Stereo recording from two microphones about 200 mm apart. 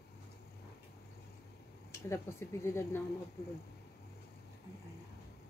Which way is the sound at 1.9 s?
15° left (ahead or behind).